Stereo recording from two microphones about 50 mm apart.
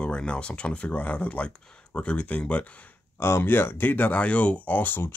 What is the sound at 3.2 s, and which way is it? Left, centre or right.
Speech, left.